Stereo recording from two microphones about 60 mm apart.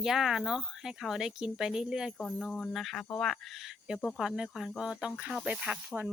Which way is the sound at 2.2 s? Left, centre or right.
Centre.